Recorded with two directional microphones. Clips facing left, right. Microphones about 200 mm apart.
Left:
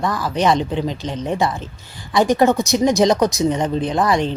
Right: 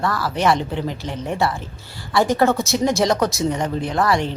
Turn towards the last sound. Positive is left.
turn(degrees=20)  # may be behind; listen again after turning